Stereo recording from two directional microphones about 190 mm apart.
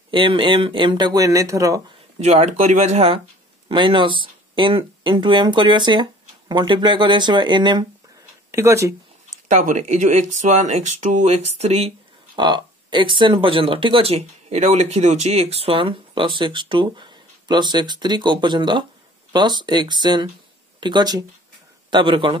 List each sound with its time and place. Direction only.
0.1 s speech: 25° right (ahead or behind)
2.1 s speech: 35° right (ahead or behind); by 8.9 s 15° right (ahead or behind)
9.5 s speech: 40° right (ahead or behind); by 22.4 s 25° right (ahead or behind)